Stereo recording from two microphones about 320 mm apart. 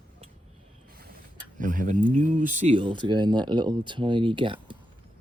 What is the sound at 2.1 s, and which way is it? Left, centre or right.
Speech, right.